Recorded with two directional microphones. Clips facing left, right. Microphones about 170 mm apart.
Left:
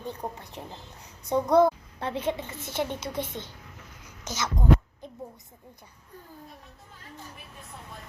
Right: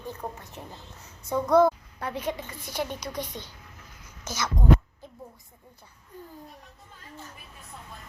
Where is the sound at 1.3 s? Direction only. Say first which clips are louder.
Even; 15° left (ahead or behind).